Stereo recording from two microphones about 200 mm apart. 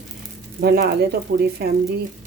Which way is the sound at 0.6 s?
50° right (ahead or behind).